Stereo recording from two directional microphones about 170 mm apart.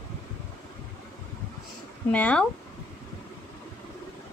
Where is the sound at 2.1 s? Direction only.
10° left (ahead or behind).